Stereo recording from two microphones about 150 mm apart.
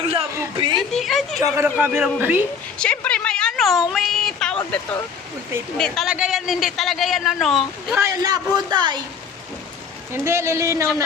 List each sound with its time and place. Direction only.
0.5 s speech: 30° right (ahead or behind)
0.8 s speech: centre (ahead or behind)
1.4 s speech: 20° right (ahead or behind)
2.7 s a sound: 5° left (ahead or behind)
5.7 s a man's voice: 5° left (ahead or behind)
7.9 s speech: 25° right (ahead or behind)
10.1 s speech: 15° right (ahead or behind)